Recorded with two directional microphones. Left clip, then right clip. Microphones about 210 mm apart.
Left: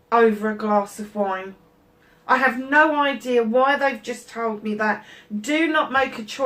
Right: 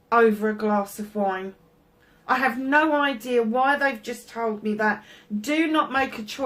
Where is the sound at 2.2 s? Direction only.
45° right (ahead or behind).